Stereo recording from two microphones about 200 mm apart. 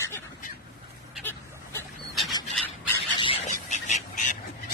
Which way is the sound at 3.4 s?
35° left (ahead or behind).